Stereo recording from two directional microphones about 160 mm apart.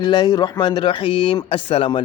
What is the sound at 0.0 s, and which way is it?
Speech, 30° left (ahead or behind).